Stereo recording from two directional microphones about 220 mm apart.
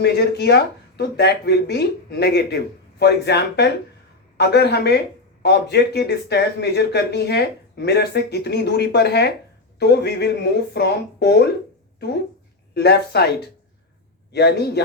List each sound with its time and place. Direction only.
0.0 s speech: 50° left (ahead or behind)
14.3 s speech: 50° left (ahead or behind)